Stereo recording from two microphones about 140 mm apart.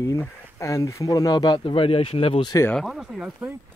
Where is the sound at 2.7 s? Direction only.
Centre (ahead or behind).